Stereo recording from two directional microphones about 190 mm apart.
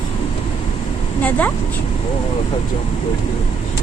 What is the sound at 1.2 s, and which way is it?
Speech, 10° left (ahead or behind).